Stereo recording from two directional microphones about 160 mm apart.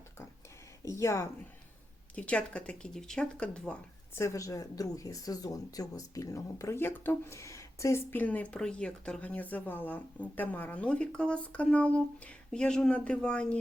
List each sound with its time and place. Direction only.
0.8 s speech: 20° left (ahead or behind)
2.1 s speech: 10° left (ahead or behind)